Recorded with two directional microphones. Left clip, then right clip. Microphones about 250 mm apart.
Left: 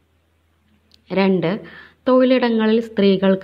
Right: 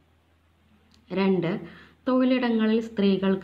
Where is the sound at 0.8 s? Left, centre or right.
Left.